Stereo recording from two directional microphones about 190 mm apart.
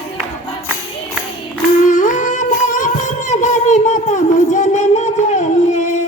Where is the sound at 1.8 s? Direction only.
40° left (ahead or behind).